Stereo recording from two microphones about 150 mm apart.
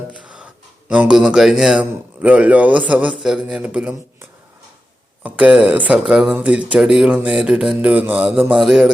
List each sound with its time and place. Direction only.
0.1 s a sound: 5° right (ahead or behind)
0.9 s speech: 5° right (ahead or behind)
5.2 s speech: 10° right (ahead or behind)
8.5 s music: centre (ahead or behind)